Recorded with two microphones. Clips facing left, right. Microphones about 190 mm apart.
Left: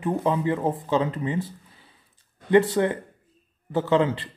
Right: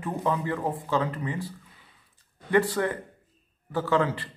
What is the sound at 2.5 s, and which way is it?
A man's voice, 20° left (ahead or behind).